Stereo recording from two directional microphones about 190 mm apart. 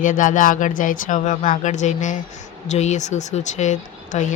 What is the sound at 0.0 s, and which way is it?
Speech, 45° left (ahead or behind).